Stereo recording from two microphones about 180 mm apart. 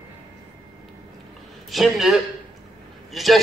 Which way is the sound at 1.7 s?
Centre (ahead or behind).